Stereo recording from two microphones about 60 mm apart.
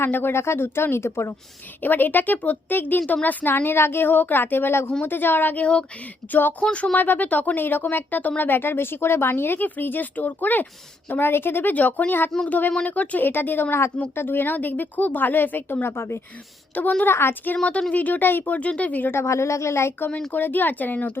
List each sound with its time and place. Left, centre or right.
0.0 s speech: left
1.8 s speech: left
6.6 s speech: centre
6.9 s speech: left
16.7 s speech: left
17.2 s speech: left
17.6 s speech: centre
19.1 s speech: left
20.3 s speech: left